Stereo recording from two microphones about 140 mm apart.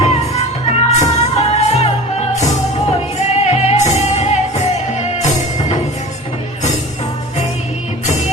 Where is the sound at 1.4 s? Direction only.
50° left (ahead or behind).